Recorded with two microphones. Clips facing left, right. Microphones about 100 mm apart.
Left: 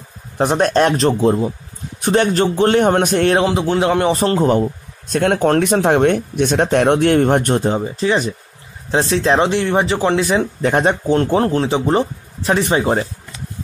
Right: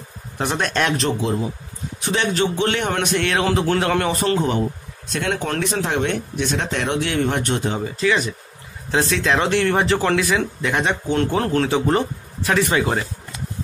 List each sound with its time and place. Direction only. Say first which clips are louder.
0.4 s speech: left 7 dB; 35° left (ahead or behind)
3.4 s speech: left 3 dB; 20° left (ahead or behind)
4.1 s speech: left 5 dB; 30° left (ahead or behind)
5.1 s speech: left 9 dB; 50° left (ahead or behind); by 9.5 s 30° left (ahead or behind)
9.5 s speech: left 1 dB; 20° left (ahead or behind)